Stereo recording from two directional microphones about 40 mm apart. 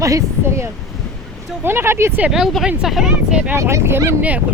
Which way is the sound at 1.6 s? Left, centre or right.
Right.